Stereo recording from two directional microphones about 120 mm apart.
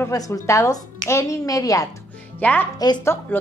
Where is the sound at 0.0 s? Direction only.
25° left (ahead or behind).